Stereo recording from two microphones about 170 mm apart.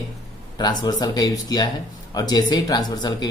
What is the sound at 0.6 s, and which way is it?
Speech, 25° left (ahead or behind).